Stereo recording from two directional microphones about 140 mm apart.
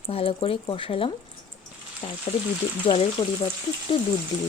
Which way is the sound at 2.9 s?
50° left (ahead or behind).